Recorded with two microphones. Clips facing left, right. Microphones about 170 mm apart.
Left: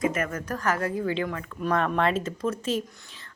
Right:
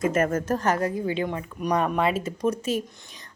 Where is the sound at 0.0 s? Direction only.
45° right (ahead or behind).